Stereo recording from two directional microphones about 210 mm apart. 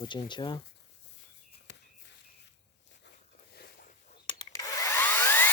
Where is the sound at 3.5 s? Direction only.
45° left (ahead or behind).